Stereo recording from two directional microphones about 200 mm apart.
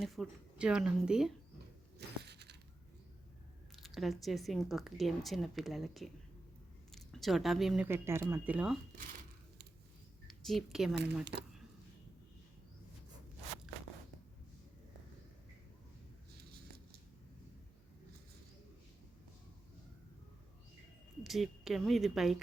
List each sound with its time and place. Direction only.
0.0 s speech: centre (ahead or behind)
2.0 s a sound: 55° right (ahead or behind)
3.8 s speech: centre (ahead or behind)
10.2 s a woman's voice: centre (ahead or behind)
21.2 s a woman's voice: centre (ahead or behind)